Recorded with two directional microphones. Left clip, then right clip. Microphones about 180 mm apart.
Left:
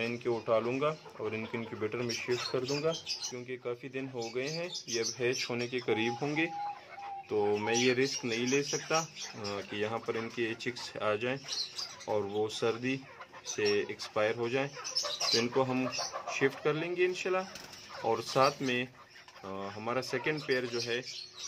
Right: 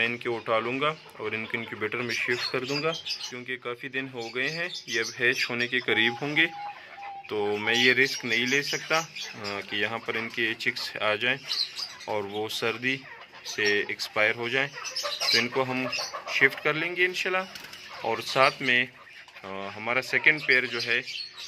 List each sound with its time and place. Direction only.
0.0 s speech: 5° right (ahead or behind)
2.7 s speech: 20° right (ahead or behind)
3.4 s speech: centre (ahead or behind)